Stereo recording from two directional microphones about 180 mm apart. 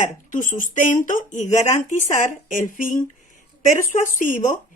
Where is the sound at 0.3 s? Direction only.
45° left (ahead or behind).